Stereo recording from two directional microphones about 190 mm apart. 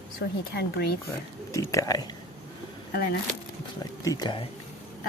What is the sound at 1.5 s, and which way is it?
Speech, 15° left (ahead or behind).